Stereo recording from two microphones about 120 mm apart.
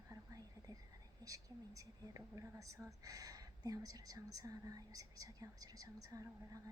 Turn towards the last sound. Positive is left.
turn(degrees=-30)  # may be behind; listen again after turning